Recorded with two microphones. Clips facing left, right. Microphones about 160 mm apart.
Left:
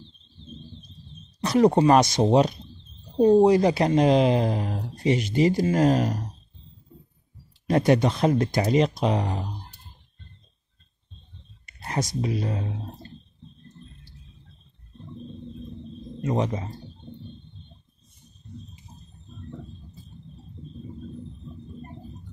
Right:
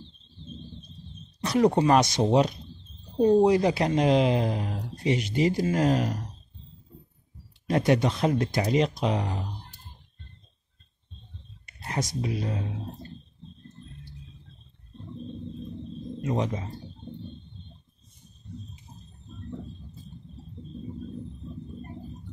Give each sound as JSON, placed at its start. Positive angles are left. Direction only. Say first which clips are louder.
{"t": 1.4, "sound": "speech", "louder": "left 3 dB", "side_deg": 40}
{"t": 7.6, "sound": "speech", "louder": "left 3 dB", "side_deg": 40}
{"t": 11.9, "sound": "speech", "louder": "left 3 dB", "side_deg": 40}